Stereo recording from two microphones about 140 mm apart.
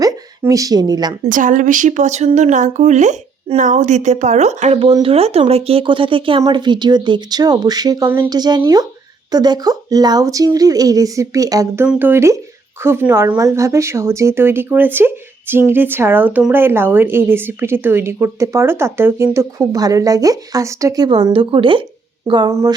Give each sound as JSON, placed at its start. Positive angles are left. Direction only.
{"t": 0.0, "sound": "speech", "side_deg": -25}
{"t": 1.2, "sound": "speech", "side_deg": -65}
{"t": 11.9, "sound": "speech", "side_deg": -15}
{"t": 21.1, "sound": "speech", "side_deg": -40}